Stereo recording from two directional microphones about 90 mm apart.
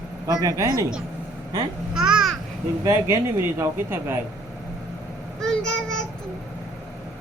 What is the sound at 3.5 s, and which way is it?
Speech, 25° right (ahead or behind).